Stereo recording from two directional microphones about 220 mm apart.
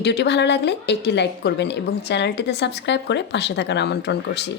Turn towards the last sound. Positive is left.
turn(degrees=50)  # may be behind; listen again after turning